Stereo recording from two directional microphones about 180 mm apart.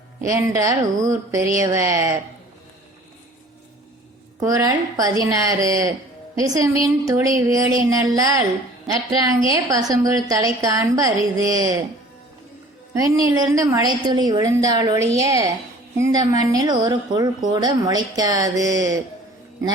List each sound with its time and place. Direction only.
0.3 s a woman's voice: 15° right (ahead or behind)
4.4 s a woman's voice: 20° right (ahead or behind)
9.5 s a woman's voice: 20° right (ahead or behind)
12.9 s a woman's voice: 20° right (ahead or behind)